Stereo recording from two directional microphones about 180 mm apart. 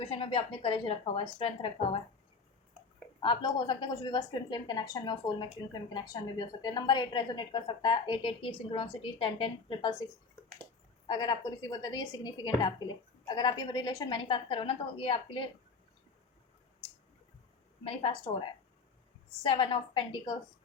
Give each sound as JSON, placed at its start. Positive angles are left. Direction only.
{"t": 0.0, "sound": "a woman's voice", "side_deg": 30}
{"t": 3.2, "sound": "a woman's voice", "side_deg": 25}
{"t": 11.1, "sound": "a woman's voice", "side_deg": 25}
{"t": 17.8, "sound": "a woman's voice", "side_deg": 30}